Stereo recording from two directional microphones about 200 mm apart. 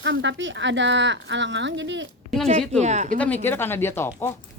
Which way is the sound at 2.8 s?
35° right (ahead or behind).